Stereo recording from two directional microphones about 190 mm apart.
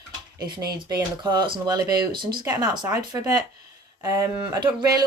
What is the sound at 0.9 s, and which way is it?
Speech, 20° right (ahead or behind).